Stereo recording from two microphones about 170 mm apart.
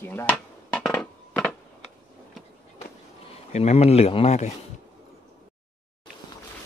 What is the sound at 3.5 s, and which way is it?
Speech, 40° left (ahead or behind).